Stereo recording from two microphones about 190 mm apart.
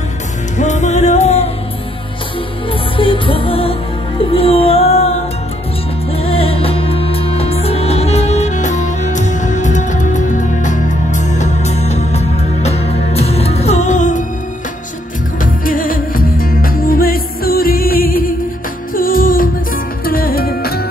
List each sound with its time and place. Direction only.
0.6 s music: 40° left (ahead or behind)
3.0 s music: 25° left (ahead or behind)
6.1 s music: 30° left (ahead or behind)
15.4 s music: 45° left (ahead or behind)